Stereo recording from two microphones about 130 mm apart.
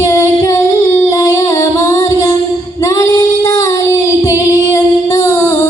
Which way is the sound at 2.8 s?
25° left (ahead or behind).